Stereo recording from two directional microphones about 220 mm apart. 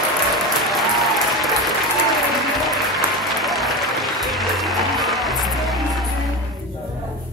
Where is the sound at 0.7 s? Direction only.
Centre (ahead or behind).